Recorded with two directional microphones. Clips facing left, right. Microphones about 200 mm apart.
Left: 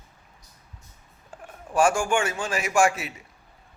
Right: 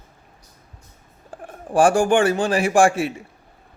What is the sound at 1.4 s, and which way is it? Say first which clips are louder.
Speech: right 5 dB; 35° right (ahead or behind).